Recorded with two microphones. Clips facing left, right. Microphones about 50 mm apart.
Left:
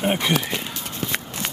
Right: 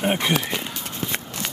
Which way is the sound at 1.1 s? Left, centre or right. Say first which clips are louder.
Left 2 dB; left.